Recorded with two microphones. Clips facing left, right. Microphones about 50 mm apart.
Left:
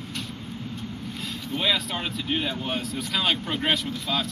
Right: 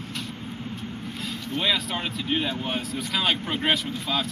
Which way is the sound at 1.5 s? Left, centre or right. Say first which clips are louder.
Even; centre.